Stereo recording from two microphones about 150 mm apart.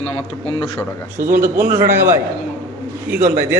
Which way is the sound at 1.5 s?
15° right (ahead or behind).